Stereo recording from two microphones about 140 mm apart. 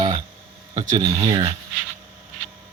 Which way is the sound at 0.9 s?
40° right (ahead or behind).